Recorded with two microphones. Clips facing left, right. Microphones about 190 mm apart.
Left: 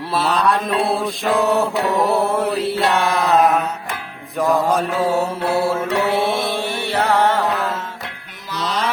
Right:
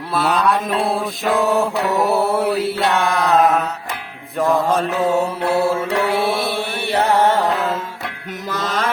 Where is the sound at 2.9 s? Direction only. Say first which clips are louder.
Even; 20° left (ahead or behind).